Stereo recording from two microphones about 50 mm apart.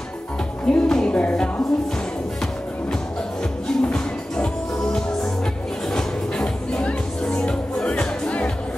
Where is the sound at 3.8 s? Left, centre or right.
Left.